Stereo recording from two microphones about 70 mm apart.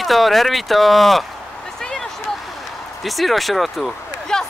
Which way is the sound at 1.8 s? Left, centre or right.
Centre.